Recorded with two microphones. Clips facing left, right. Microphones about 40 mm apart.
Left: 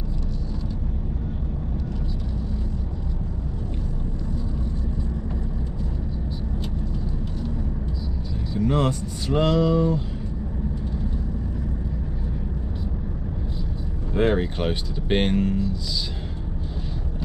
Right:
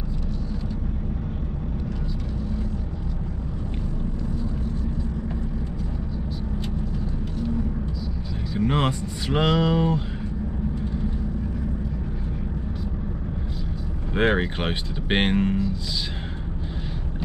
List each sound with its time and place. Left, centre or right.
8.5 s speech: right
14.1 s speech: right